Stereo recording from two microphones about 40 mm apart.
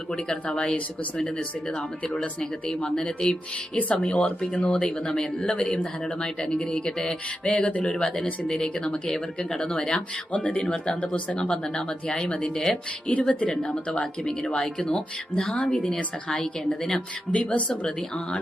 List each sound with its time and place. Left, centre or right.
0.1 s speech: left
7.4 s speech: left
13.1 s speech: left
13.5 s speech: left
17.4 s speech: left
17.7 s speech: centre